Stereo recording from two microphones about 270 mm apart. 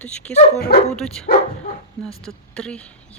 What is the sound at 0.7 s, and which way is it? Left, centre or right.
Speech, left.